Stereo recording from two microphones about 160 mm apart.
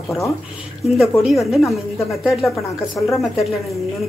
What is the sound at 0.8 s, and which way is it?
A woman's voice, centre (ahead or behind).